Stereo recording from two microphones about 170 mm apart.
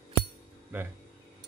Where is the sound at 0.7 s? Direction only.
10° right (ahead or behind).